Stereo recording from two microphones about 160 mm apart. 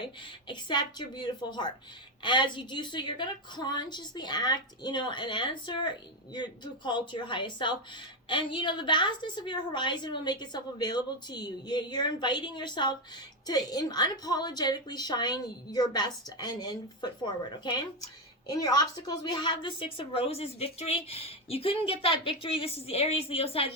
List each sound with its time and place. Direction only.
0.0 s a woman's voice: 30° left (ahead or behind)